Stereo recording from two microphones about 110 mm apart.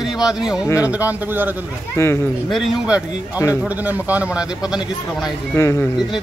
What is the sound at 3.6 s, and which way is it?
A man's voice, 15° right (ahead or behind).